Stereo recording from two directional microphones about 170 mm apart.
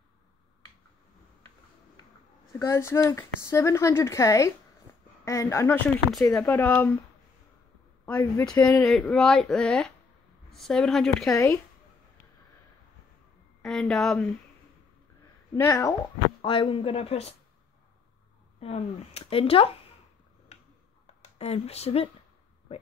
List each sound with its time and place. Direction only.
2.6 s speech: 15° left (ahead or behind)
4.9 s a sound: 10° left (ahead or behind)
5.2 s speech: 20° left (ahead or behind)
8.0 s speech: 10° left (ahead or behind)
11.3 s speech: 15° left (ahead or behind)
13.6 s a woman's voice: 5° left (ahead or behind)
15.5 s speech: 20° left (ahead or behind)
16.3 s speech: 30° left (ahead or behind)
18.6 s speech: 35° left (ahead or behind)
21.2 s speech: 35° left (ahead or behind)